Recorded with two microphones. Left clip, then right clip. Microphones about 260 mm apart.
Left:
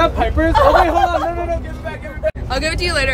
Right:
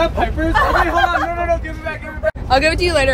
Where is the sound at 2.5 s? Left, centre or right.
Centre.